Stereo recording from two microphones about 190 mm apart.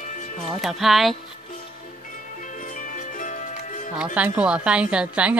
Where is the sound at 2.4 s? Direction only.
40° left (ahead or behind).